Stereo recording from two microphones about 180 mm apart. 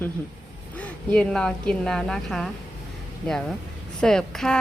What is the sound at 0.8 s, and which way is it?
A woman's voice, 5° left (ahead or behind).